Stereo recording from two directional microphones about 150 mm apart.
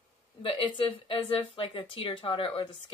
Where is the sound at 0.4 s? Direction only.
35° left (ahead or behind).